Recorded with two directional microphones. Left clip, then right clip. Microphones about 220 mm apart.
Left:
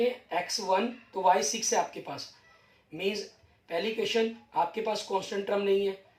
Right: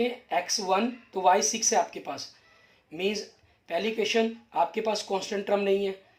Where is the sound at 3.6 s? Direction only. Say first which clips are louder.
Right 3 dB; 45° right (ahead or behind).